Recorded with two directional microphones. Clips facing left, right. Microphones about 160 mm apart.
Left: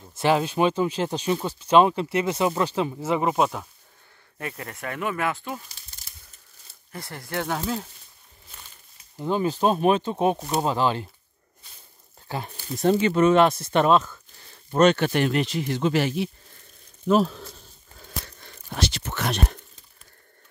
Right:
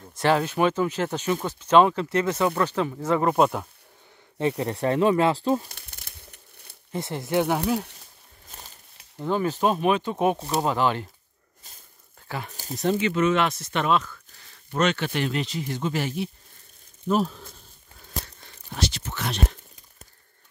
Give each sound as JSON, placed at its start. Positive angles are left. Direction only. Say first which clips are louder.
{"t": 0.2, "sound": "speech", "louder": "even", "side_deg": 15}
{"t": 4.4, "sound": "speech", "louder": "right 10 dB", "side_deg": -30}
{"t": 5.7, "sound": "crumpling", "louder": "right 5 dB", "side_deg": -60}
{"t": 6.9, "sound": "speech", "louder": "right 7 dB", "side_deg": -20}
{"t": 8.5, "sound": "a sound", "louder": "right 3 dB", "side_deg": -40}
{"t": 9.2, "sound": "speech", "louder": "left 1 dB", "side_deg": 15}
{"t": 9.6, "sound": "speech", "louder": "left 3 dB", "side_deg": 35}
{"t": 12.3, "sound": "speech", "louder": "left 2 dB", "side_deg": 30}
{"t": 14.0, "sound": "a sound", "louder": "left 1 dB", "side_deg": 30}
{"t": 15.0, "sound": "speech", "louder": "left 4 dB", "side_deg": 55}
{"t": 18.7, "sound": "speech", "louder": "left 1 dB", "side_deg": 65}